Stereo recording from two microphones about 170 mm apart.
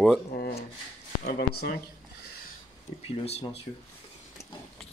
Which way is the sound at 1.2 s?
65° left (ahead or behind).